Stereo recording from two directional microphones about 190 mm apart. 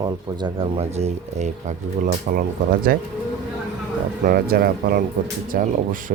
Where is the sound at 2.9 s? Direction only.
50° right (ahead or behind).